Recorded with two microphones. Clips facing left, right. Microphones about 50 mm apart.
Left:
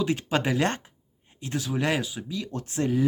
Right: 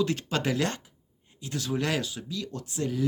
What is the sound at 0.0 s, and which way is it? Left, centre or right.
Speech, centre.